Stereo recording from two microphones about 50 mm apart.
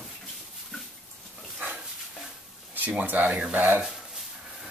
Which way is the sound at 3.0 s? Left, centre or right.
Right.